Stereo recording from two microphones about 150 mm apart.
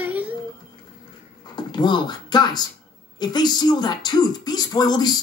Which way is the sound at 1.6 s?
30° left (ahead or behind).